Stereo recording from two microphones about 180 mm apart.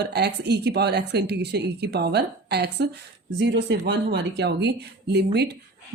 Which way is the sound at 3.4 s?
75° right (ahead or behind).